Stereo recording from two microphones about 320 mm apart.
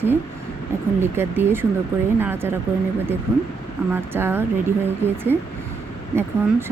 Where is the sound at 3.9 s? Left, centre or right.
Centre.